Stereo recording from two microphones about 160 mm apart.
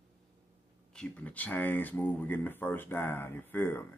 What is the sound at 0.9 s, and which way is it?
Speech, 5° left (ahead or behind).